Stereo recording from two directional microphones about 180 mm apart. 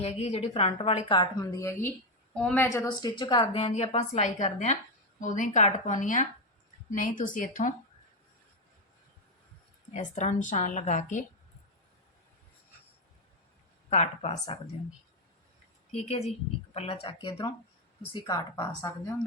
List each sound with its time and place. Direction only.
0.0 s a woman's voice: 35° left (ahead or behind); by 1.9 s 15° left (ahead or behind)
2.3 s a woman's voice: 5° left (ahead or behind)
2.6 s a woman's voice: 20° left (ahead or behind); by 7.7 s 45° left (ahead or behind)
9.9 s a woman's voice: 45° left (ahead or behind)
13.9 s a woman's voice: 40° left (ahead or behind)
15.9 s a woman's voice: 35° left (ahead or behind); by 18.9 s 15° left (ahead or behind)